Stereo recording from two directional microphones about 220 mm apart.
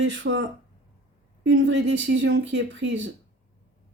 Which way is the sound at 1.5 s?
55° right (ahead or behind).